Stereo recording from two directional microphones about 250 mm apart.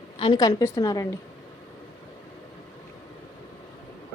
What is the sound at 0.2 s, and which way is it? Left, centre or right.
Speech, centre.